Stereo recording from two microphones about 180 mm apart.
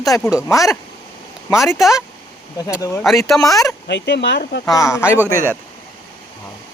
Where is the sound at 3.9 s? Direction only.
75° left (ahead or behind).